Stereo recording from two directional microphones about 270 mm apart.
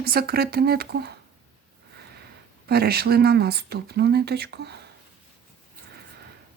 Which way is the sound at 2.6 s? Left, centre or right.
Right.